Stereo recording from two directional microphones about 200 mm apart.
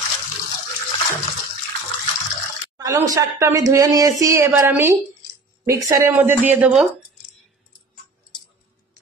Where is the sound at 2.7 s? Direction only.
15° right (ahead or behind).